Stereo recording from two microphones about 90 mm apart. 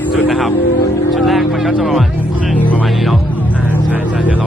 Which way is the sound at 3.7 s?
15° right (ahead or behind).